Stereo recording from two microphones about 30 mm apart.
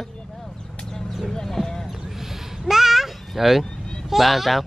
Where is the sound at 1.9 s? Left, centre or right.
Centre.